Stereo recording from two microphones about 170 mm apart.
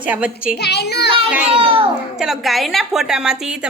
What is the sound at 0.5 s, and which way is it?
Speech, 75° left (ahead or behind).